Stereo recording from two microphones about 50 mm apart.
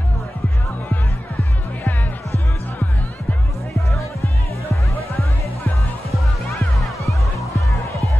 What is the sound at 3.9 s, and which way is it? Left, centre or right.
Music, left.